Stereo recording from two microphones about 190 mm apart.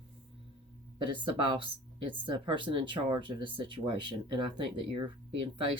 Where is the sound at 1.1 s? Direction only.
25° right (ahead or behind).